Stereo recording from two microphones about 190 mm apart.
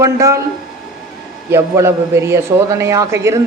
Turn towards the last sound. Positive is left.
turn(degrees=-15)  # may be behind; listen again after turning